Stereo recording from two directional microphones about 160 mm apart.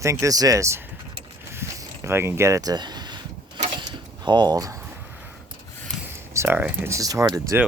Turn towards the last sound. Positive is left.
turn(degrees=-20)  # may be behind; listen again after turning